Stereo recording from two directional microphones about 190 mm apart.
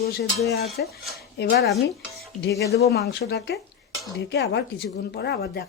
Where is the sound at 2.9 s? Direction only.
60° left (ahead or behind).